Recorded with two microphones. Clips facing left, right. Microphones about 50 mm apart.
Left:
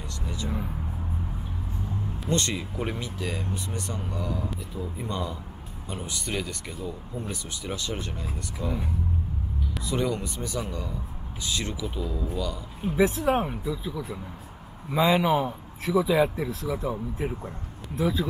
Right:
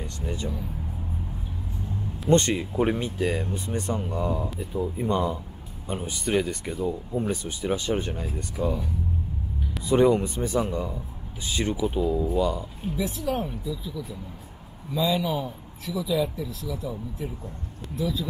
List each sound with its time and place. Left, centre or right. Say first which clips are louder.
0.0 s vehicle: right 3 dB; right
2.2 s speech: right 7 dB; right
9.8 s speech: right 9 dB; right
13.0 s speech: left 6 dB; left